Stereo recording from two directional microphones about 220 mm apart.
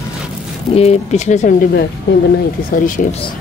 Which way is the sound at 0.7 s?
30° left (ahead or behind).